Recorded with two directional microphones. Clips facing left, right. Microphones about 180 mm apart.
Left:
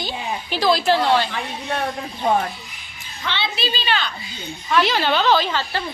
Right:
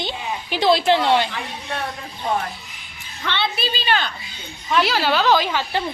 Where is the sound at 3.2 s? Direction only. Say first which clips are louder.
Right 1 dB; 55° right (ahead or behind).